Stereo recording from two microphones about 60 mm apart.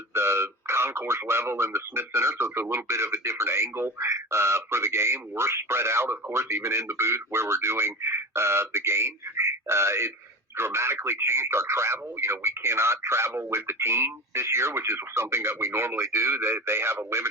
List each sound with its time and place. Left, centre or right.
0.1 s speech: right